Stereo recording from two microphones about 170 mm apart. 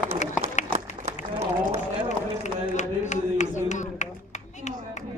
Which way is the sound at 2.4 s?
45° left (ahead or behind).